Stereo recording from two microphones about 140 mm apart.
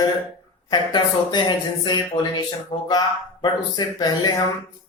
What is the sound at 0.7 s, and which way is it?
Speech, 30° left (ahead or behind).